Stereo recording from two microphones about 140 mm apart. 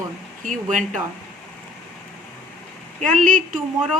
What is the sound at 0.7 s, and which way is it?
Speech, 65° right (ahead or behind).